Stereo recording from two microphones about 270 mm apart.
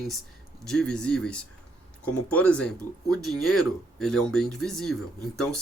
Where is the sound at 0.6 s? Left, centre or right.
Centre.